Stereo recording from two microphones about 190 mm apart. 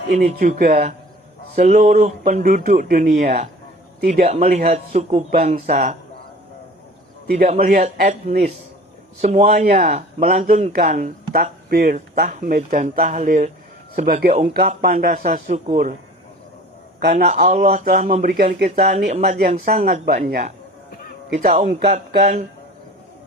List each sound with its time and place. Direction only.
0.2 s speech: 45° right (ahead or behind)
7.7 s speech: 45° right (ahead or behind)
11.7 s speech: 50° right (ahead or behind)
17.1 s speech: 45° right (ahead or behind)